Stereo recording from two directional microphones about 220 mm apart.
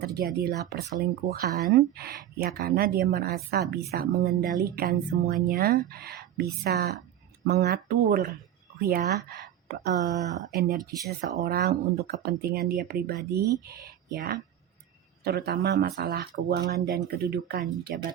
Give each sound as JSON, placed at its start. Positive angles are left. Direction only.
{"t": 0.0, "sound": "speech", "side_deg": -45}